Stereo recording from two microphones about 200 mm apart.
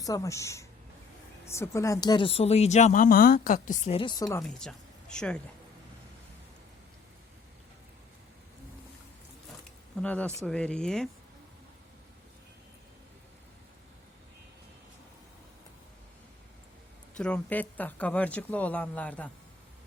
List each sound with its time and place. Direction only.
0.0 s speech: 15° left (ahead or behind); by 3.9 s 40° left (ahead or behind)
3.9 s speech: 20° left (ahead or behind)
4.4 s speech: 5° left (ahead or behind)
10.0 s speech: 5° left (ahead or behind)
17.2 s speech: 5° left (ahead or behind)